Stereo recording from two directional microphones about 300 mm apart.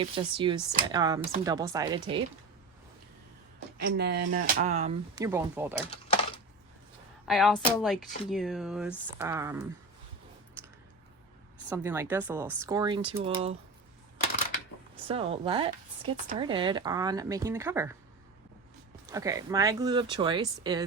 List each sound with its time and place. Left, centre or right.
0.0 s speech: centre
3.8 s speech: right; by 5.7 s centre
7.3 s speech: centre
11.7 s speech: centre
14.9 s speech: centre
19.1 s speech: centre